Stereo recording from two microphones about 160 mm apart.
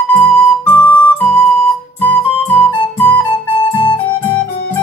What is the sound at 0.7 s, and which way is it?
Music, 10° left (ahead or behind).